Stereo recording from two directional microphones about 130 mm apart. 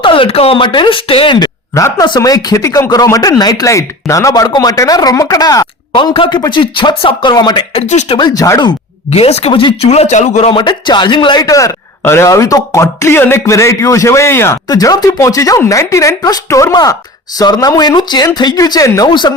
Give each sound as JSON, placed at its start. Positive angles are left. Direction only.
{"t": 0.0, "sound": "speech", "side_deg": 45}
{"t": 1.4, "sound": "speech", "side_deg": 25}
{"t": 7.7, "sound": "speech", "side_deg": 55}
{"t": 8.1, "sound": "speech", "side_deg": 30}
{"t": 9.0, "sound": "speech", "side_deg": 50}
{"t": 10.5, "sound": "speech", "side_deg": 35}